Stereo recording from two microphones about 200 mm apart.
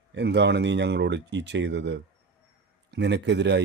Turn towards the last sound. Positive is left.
turn(degrees=-60)  # may be behind; listen again after turning